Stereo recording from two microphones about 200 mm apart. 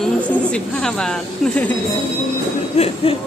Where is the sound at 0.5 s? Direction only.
5° left (ahead or behind).